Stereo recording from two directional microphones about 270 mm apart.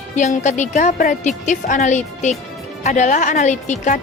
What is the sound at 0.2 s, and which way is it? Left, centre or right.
A woman's voice, left.